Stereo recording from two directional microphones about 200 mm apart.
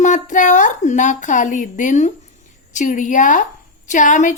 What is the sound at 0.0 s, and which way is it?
Speech, 40° left (ahead or behind).